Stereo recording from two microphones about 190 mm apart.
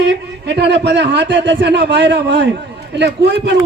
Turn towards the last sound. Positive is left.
turn(degrees=-65)  # may be behind; listen again after turning